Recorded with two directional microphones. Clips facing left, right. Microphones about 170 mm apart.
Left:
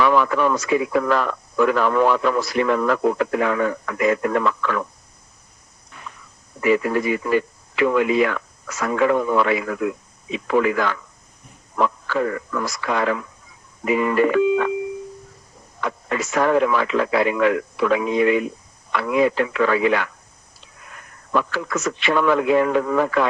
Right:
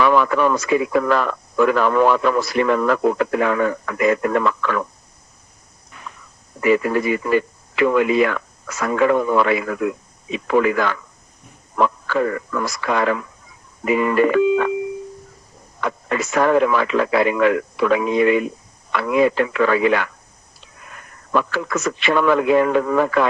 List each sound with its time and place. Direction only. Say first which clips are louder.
0.0 s speech: right 2 dB; 60° right (ahead or behind)
6.6 s speech: right 2 dB; 60° right (ahead or behind)
15.8 s speech: right 2 dB; 60° right (ahead or behind)
21.3 s speech: right 2 dB; 60° right (ahead or behind)